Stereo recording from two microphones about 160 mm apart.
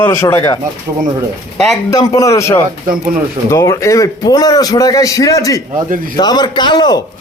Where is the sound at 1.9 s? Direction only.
20° left (ahead or behind).